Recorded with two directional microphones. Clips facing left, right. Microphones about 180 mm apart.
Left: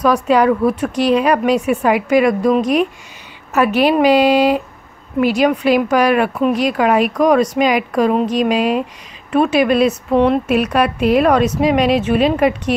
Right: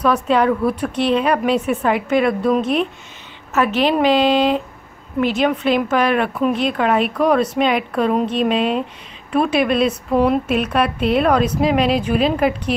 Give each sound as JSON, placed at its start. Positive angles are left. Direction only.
{"t": 0.0, "sound": "a woman's voice", "side_deg": 5}